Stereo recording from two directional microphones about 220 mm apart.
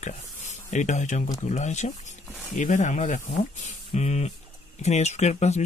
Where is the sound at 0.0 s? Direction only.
35° left (ahead or behind).